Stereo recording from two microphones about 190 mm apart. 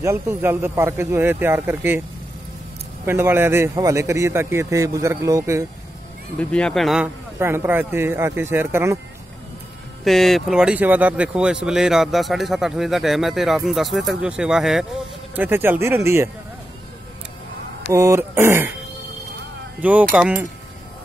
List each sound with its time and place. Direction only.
0.0 s speech: 15° right (ahead or behind)
3.1 s speech: 10° right (ahead or behind)
6.3 s speech: 5° left (ahead or behind)
7.3 s speech: 10° right (ahead or behind)
10.0 s speech: centre (ahead or behind)
17.9 s speech: 15° right (ahead or behind)
19.8 s speech: 5° right (ahead or behind)